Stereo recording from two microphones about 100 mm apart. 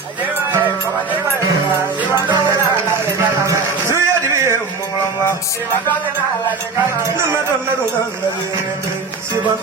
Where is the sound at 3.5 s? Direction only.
30° right (ahead or behind).